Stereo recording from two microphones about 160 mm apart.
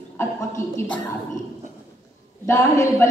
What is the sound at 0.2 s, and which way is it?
Speech, 15° left (ahead or behind).